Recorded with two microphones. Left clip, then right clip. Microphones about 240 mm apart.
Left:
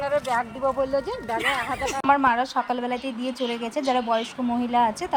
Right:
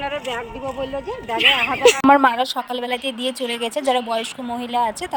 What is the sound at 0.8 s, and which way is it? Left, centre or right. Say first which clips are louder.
Speech: left 2 dB; centre.